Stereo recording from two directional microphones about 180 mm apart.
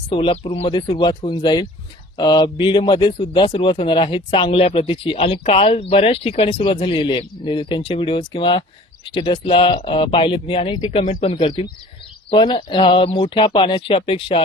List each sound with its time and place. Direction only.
0.1 s speech: 30° left (ahead or behind)